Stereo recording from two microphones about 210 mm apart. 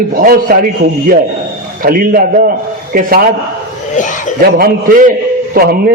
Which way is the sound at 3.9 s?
35° left (ahead or behind).